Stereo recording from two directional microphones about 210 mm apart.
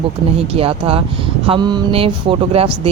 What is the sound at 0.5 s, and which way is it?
A woman's voice, 25° right (ahead or behind).